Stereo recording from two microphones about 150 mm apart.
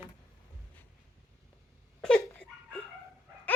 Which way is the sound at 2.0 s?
5° left (ahead or behind).